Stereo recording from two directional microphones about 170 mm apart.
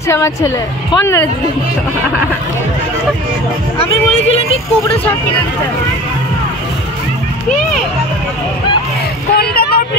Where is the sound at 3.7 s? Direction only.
35° left (ahead or behind).